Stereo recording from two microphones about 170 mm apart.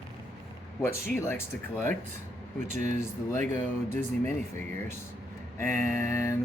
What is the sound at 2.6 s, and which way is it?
Speech, 45° right (ahead or behind).